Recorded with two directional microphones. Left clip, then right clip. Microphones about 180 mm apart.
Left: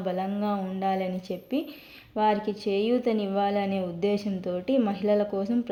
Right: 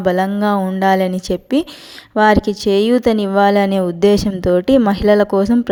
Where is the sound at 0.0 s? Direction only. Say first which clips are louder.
Right 14 dB; 45° right (ahead or behind).